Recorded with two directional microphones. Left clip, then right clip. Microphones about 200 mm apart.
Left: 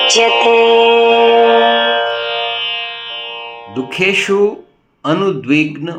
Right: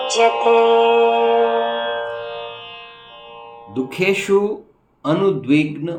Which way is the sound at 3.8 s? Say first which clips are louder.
Left 5 dB; 10° left (ahead or behind).